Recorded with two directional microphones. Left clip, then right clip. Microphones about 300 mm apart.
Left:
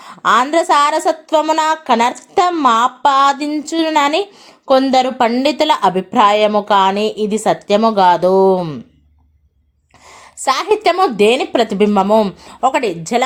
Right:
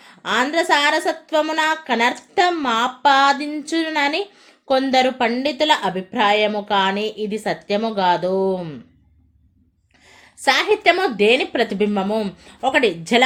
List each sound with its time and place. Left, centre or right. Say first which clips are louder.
0.0 s a woman's voice: left 8 dB; centre
10.1 s a woman's voice: left 2 dB; centre